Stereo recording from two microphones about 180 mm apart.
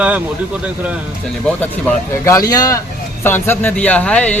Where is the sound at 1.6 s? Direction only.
10° left (ahead or behind).